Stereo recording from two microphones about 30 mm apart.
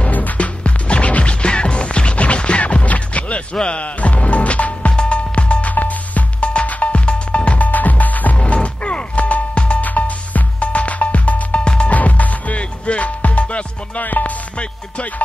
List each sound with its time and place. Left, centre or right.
0.1 s music: left
0.7 s music: left
3.5 s speech: left
3.8 s music: left
5.8 s music: left
6.4 s music: left
6.7 s music: left
7.1 s music: left
7.6 s music: left
8.8 s music: left
11.5 s music: left
11.9 s music: left
12.5 s music: left
14.0 s music: left